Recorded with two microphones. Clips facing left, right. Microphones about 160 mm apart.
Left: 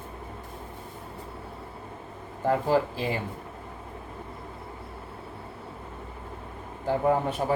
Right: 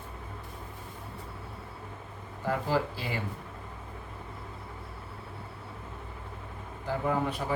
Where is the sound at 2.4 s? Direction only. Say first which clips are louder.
Left 6 dB; 45° left (ahead or behind).